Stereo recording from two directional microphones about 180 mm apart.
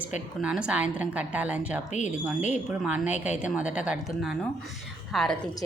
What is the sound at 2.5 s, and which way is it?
A woman's voice, 5° right (ahead or behind).